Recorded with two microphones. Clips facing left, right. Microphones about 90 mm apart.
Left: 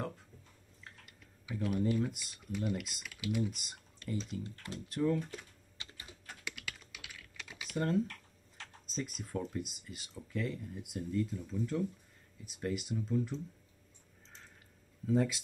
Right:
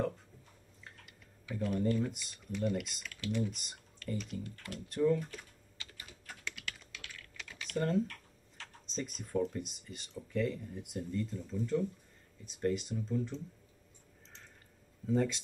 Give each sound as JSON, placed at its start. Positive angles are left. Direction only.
{"t": 1.4, "sound": "speech", "side_deg": 5}
{"t": 4.2, "sound": "speech", "side_deg": 25}
{"t": 4.8, "sound": "speech", "side_deg": 0}
{"t": 5.3, "sound": "typing", "side_deg": 25}
{"t": 6.5, "sound": "typing", "side_deg": 0}
{"t": 8.8, "sound": "speech", "side_deg": 5}
{"t": 15.0, "sound": "speech", "side_deg": 0}